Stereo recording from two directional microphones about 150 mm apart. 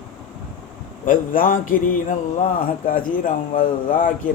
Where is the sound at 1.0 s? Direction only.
65° left (ahead or behind).